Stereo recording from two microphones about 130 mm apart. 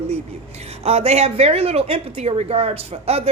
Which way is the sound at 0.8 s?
50° right (ahead or behind).